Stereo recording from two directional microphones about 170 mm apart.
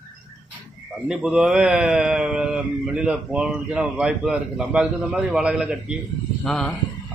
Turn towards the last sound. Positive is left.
turn(degrees=5)  # may be behind; listen again after turning